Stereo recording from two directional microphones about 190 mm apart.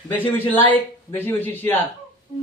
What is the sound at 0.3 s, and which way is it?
A man's voice, 10° left (ahead or behind).